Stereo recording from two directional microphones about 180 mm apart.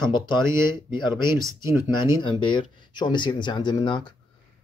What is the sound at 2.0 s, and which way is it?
Speech, 25° left (ahead or behind).